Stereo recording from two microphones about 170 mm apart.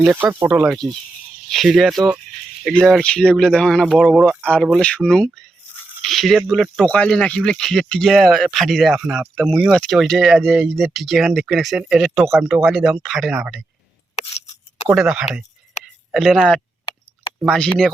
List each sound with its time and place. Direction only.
0.0 s speech: 5° right (ahead or behind)
14.2 s scissors: 40° left (ahead or behind)
14.8 s speech: 5° right (ahead or behind)